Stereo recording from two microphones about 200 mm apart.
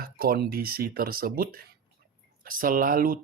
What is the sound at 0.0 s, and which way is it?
Speech, 50° right (ahead or behind).